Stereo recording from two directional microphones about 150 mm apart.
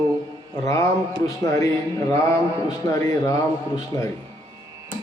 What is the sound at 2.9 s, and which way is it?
A man's voice, 25° left (ahead or behind).